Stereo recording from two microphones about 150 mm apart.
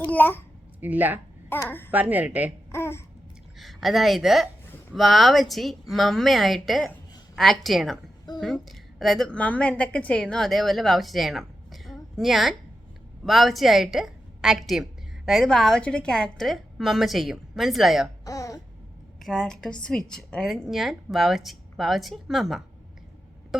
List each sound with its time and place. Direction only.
0.0 s a child's voice: 10° left (ahead or behind)
0.8 s a woman's voice: 10° right (ahead or behind)
1.5 s a child's voice: 15° left (ahead or behind)
1.9 s a woman's voice: 10° right (ahead or behind)
2.7 s a child's voice: 15° left (ahead or behind)
3.6 s a woman's voice: centre (ahead or behind)
4.6 s a sound: 15° left (ahead or behind)
4.9 s a woman's voice: centre (ahead or behind)
18.3 s a sound: 20° left (ahead or behind)
19.2 s a woman's voice: centre (ahead or behind)